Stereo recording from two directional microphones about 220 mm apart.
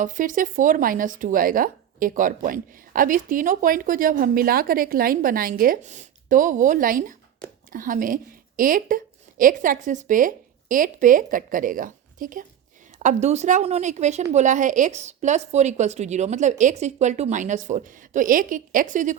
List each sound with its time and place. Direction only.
0.0 s a woman's voice: 35° right (ahead or behind)